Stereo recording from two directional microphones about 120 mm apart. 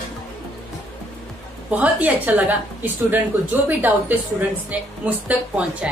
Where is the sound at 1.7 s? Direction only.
10° right (ahead or behind).